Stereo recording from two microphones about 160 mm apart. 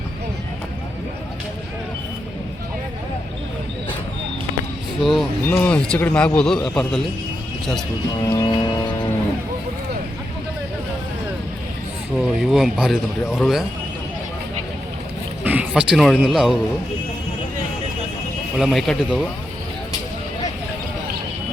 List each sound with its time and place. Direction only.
4.9 s speech: centre (ahead or behind)
8.2 s music: 30° left (ahead or behind)
12.1 s speech: centre (ahead or behind)
15.4 s speech: 5° right (ahead or behind)
18.5 s speech: centre (ahead or behind)